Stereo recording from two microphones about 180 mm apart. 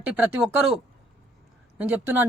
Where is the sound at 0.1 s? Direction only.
5° right (ahead or behind).